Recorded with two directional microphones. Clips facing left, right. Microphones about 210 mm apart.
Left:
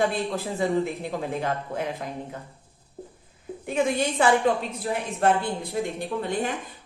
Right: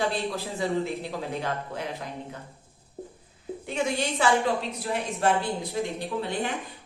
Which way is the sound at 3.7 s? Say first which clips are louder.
Left 4 dB; 50° left (ahead or behind).